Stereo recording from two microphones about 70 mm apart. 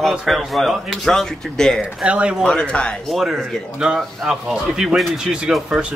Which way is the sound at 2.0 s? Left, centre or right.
Centre.